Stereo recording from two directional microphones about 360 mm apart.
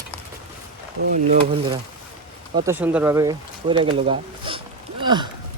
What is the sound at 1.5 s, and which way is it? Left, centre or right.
Speech, centre.